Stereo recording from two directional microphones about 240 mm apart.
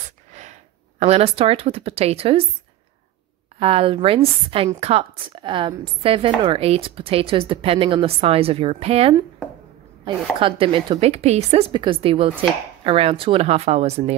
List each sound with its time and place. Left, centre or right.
0.3 s speech: right
3.5 s a woman's voice: right
10.4 s a woman's voice: right